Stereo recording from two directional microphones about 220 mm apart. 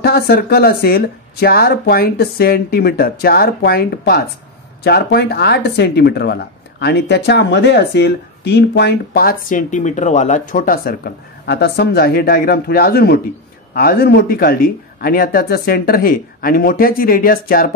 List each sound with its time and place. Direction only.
0.0 s speech: 45° left (ahead or behind)